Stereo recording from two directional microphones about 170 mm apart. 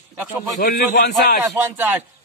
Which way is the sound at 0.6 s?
55° left (ahead or behind).